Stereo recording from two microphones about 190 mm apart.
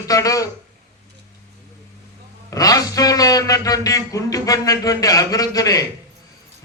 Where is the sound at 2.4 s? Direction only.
20° left (ahead or behind).